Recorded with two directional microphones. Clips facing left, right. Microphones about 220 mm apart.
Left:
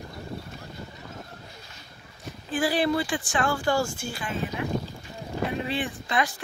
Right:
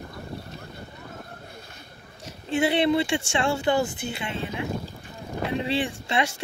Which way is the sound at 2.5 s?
25° right (ahead or behind).